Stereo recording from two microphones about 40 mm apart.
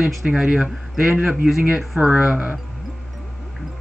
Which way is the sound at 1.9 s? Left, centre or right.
Right.